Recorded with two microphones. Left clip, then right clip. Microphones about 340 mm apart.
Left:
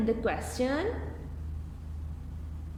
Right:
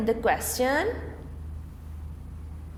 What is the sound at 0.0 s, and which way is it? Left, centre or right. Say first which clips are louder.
Speech: right 5 dB; right.